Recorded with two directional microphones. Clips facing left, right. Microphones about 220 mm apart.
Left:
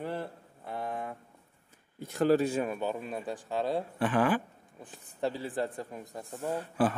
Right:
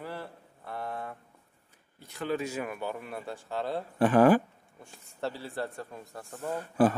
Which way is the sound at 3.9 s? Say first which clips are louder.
Right 8 dB; 40° right (ahead or behind).